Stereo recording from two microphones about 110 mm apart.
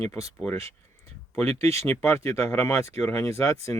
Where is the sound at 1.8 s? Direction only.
25° left (ahead or behind).